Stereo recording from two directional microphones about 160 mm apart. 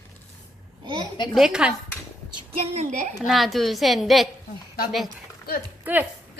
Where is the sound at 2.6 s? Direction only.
45° right (ahead or behind).